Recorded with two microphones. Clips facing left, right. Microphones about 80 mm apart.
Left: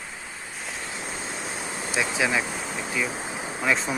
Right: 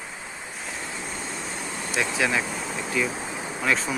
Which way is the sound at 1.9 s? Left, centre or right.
Centre.